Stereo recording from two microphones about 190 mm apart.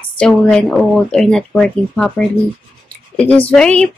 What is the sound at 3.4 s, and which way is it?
Speech, 5° left (ahead or behind).